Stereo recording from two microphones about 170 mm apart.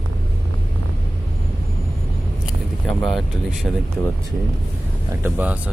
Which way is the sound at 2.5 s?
Centre (ahead or behind).